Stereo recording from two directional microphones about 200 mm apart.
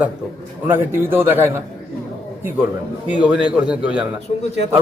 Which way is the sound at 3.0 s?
5° right (ahead or behind).